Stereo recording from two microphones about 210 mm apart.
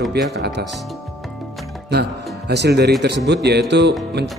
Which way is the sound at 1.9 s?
50° right (ahead or behind).